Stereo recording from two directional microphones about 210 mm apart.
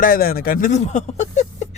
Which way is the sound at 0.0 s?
45° left (ahead or behind).